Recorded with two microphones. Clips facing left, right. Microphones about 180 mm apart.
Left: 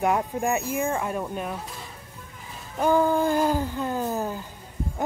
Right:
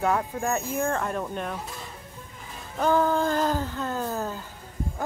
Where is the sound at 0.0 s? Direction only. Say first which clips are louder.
Left 2 dB; 15° left (ahead or behind).